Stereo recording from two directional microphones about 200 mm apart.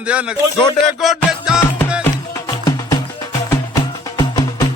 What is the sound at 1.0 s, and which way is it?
Music, centre (ahead or behind).